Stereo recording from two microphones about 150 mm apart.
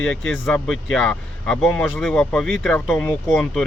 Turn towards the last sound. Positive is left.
turn(degrees=5)  # may be behind; listen again after turning